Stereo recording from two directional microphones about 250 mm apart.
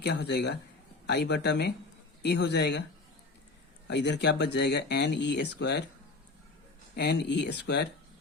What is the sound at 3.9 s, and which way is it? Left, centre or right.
Speech, left.